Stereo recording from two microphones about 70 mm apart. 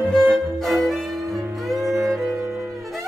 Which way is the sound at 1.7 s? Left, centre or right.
Right.